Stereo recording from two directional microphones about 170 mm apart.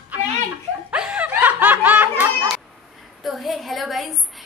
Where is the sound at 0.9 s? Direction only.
5° right (ahead or behind).